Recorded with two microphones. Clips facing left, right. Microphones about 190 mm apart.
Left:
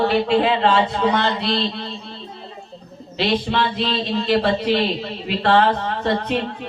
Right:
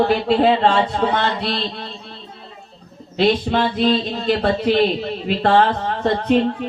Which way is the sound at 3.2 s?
50° right (ahead or behind).